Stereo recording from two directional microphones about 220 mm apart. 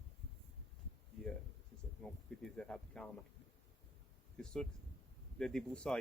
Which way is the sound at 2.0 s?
5° left (ahead or behind).